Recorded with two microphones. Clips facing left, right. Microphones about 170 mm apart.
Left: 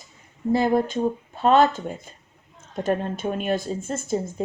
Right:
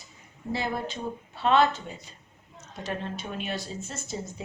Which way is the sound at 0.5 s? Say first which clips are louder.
Left 10 dB; 45° left (ahead or behind).